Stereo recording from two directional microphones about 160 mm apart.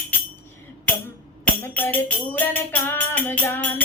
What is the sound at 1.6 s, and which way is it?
Music, 10° left (ahead or behind).